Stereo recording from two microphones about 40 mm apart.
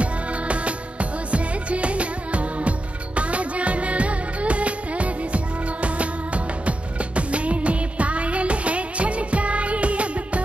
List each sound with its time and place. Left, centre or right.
0.0 s music: right